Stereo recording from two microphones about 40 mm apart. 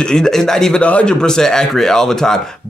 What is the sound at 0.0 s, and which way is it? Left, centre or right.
Speech, centre.